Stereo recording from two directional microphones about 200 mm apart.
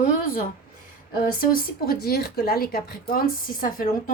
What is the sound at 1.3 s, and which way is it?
A woman's voice, 50° left (ahead or behind).